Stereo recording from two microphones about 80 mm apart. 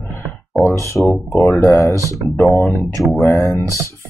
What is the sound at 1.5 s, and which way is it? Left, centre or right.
Speech, left.